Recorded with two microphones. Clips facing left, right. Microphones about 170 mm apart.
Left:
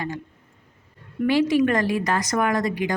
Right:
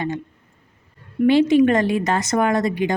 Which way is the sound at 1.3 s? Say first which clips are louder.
Right 5 dB; 25° right (ahead or behind).